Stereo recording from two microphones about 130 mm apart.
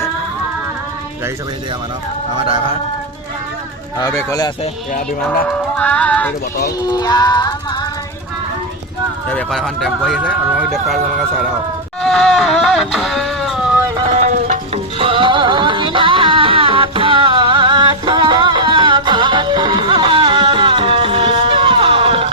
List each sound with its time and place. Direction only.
2.3 s music: 40° right (ahead or behind)
3.9 s speech: 25° left (ahead or behind)
5.5 s music: 10° left (ahead or behind)
6.7 s music: 30° left (ahead or behind)
9.5 s speech: centre (ahead or behind)
12.0 s a sound: 5° left (ahead or behind)
14.1 s music: 65° right (ahead or behind)
14.9 s music: 45° right (ahead or behind)